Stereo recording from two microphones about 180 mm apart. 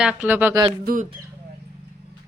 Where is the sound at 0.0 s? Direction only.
5° right (ahead or behind).